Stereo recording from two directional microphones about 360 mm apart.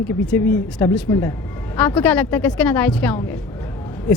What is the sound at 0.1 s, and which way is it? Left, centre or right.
A man's voice, centre.